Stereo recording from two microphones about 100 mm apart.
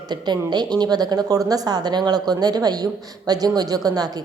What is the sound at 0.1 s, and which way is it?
A woman's voice, 45° right (ahead or behind).